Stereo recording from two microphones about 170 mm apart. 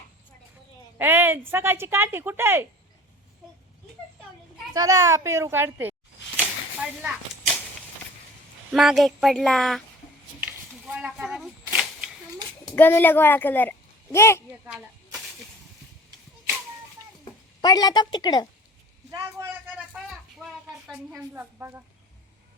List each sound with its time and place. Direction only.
0.9 s speech: 10° right (ahead or behind)
4.7 s a sound: 20° right (ahead or behind); by 7.6 s 5° right (ahead or behind)
8.7 s speech: centre (ahead or behind)
10.4 s a sound: centre (ahead or behind)
12.7 s speech: 10° left (ahead or behind)
14.5 s speech: 10° right (ahead or behind)
15.2 s snake: centre (ahead or behind)
17.6 s a woman's voice: 25° left (ahead or behind)
19.1 s a sound: 10° right (ahead or behind)
20.8 s speech: 5° right (ahead or behind)